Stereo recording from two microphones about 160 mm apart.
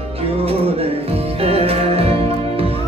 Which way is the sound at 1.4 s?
40° right (ahead or behind).